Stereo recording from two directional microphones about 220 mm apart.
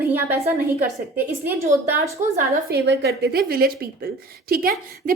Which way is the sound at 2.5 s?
45° right (ahead or behind).